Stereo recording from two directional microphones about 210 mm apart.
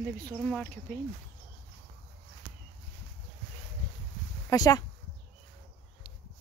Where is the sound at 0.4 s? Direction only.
5° left (ahead or behind).